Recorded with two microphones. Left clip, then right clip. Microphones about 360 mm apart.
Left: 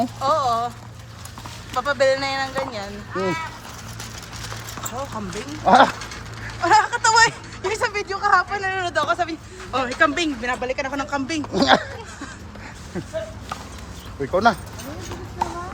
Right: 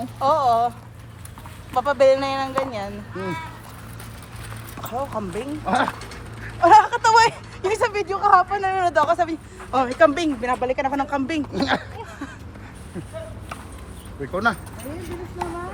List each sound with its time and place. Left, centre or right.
0.2 s a sound: centre
1.7 s speech: centre
3.2 s speech: left
4.8 s speech: centre
5.6 s speech: centre
6.6 s speech: centre
11.5 s speech: centre
14.2 s speech: centre
15.4 s clip-clop: centre